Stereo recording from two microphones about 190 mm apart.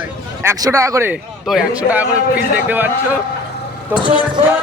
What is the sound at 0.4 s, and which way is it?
Speech, 15° right (ahead or behind).